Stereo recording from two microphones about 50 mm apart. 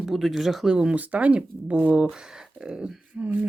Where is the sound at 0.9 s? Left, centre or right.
Right.